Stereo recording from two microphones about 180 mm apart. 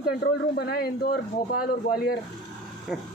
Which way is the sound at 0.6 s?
60° left (ahead or behind).